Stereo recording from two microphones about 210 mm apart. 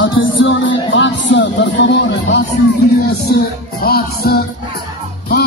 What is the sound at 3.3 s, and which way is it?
Music, 50° left (ahead or behind).